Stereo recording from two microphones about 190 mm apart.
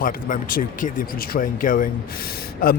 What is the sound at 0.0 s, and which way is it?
A man's voice, 45° left (ahead or behind).